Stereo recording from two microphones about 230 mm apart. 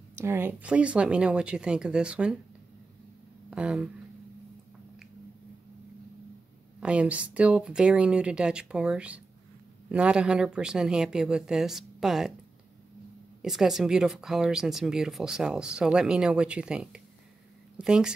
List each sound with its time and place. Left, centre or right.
0.1 s speech: centre
3.4 s speech: centre
6.8 s speech: centre
13.4 s speech: centre